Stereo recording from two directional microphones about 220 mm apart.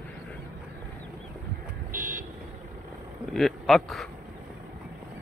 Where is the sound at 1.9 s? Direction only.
40° right (ahead or behind).